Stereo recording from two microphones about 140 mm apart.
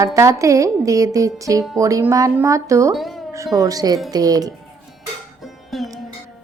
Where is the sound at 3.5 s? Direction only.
25° right (ahead or behind).